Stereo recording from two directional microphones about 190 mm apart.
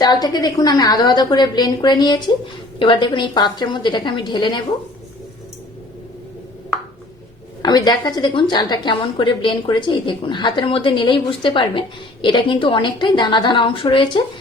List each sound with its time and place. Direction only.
0.0 s a woman's voice: 20° left (ahead or behind)
7.6 s a woman's voice: 20° left (ahead or behind)